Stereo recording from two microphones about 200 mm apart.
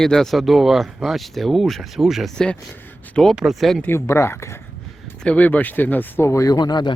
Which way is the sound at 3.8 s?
15° left (ahead or behind).